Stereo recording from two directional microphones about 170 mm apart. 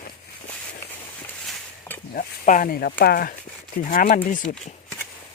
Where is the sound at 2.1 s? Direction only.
55° left (ahead or behind).